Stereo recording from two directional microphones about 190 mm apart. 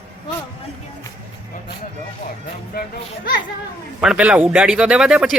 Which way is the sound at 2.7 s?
55° left (ahead or behind).